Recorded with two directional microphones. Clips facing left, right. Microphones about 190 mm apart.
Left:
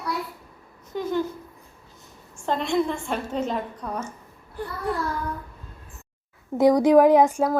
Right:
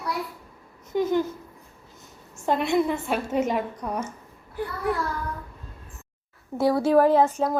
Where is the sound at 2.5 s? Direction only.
10° right (ahead or behind).